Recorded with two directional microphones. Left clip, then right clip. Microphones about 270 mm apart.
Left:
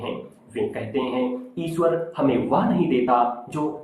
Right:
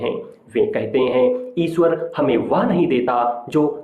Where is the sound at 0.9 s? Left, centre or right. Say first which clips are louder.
Right 10 dB; right.